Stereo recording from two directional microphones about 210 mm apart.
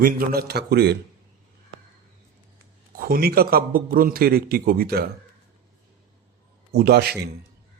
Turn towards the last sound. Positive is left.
turn(degrees=-50)  # may be behind; listen again after turning